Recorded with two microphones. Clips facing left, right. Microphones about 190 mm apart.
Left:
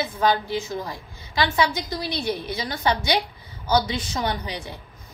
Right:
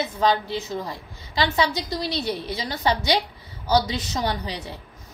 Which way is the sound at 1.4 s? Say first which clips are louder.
Even; 30° right (ahead or behind).